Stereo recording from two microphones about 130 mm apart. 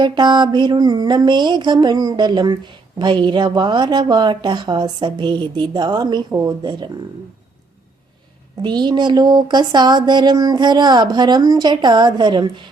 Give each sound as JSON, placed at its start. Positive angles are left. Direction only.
{"t": 0.0, "sound": "speech", "side_deg": -35}
{"t": 8.6, "sound": "speech", "side_deg": -35}